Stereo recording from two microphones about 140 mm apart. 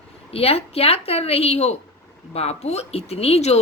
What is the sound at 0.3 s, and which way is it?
Speech, 45° left (ahead or behind).